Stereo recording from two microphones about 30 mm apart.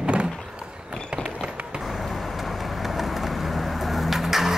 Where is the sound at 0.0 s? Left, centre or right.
Right.